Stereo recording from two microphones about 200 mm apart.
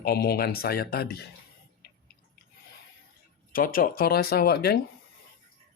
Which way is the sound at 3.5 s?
45° left (ahead or behind).